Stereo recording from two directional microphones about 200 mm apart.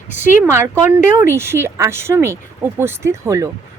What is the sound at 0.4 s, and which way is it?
Speech, 10° right (ahead or behind).